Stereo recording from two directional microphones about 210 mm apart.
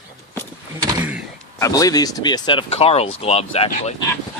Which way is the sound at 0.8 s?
5° right (ahead or behind).